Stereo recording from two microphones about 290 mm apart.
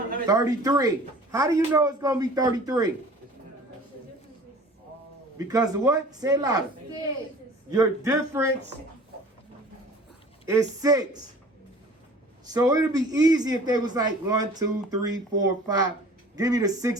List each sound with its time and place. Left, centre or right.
0.3 s a man's voice: centre
5.4 s a man's voice: centre
7.7 s a man's voice: centre
10.4 s a man's voice: centre
12.5 s a man's voice: centre